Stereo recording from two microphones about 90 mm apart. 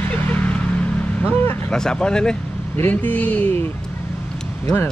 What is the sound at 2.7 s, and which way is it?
Speech, 20° left (ahead or behind).